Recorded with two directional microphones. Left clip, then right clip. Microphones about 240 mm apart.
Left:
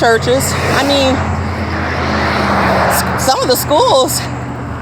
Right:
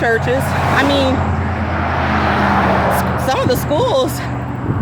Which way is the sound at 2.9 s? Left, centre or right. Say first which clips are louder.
Left 2 dB; left.